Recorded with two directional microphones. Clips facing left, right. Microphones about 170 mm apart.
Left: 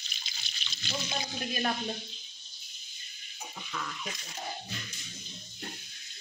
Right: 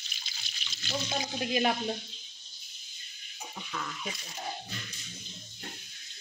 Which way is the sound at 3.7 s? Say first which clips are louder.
Right 1 dB; 5° right (ahead or behind).